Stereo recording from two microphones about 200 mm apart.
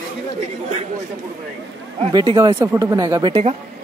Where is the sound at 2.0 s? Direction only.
25° right (ahead or behind).